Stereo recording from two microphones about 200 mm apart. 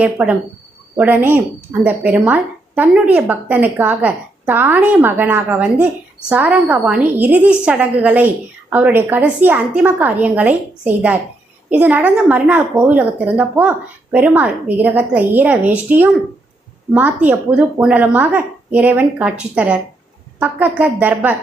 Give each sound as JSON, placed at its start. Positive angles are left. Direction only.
{"t": 0.0, "sound": "a woman's voice", "side_deg": -5}
{"t": 17.2, "sound": "a woman's voice", "side_deg": -5}